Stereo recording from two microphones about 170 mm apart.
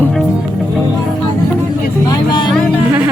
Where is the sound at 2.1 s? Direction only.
25° left (ahead or behind).